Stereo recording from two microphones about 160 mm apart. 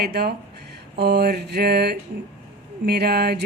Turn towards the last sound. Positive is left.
turn(degrees=-85)